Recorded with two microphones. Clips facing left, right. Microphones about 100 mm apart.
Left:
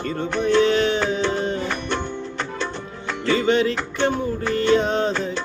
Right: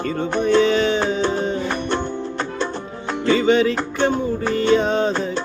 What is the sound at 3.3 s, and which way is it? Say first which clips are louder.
Music: right 2 dB; centre (ahead or behind).